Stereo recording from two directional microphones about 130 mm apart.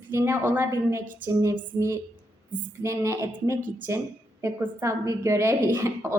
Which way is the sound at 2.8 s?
20° right (ahead or behind).